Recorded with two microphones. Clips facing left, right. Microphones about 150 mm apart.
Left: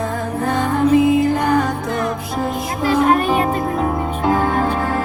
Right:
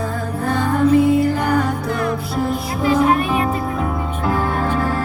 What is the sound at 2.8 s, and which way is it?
Music, 35° left (ahead or behind).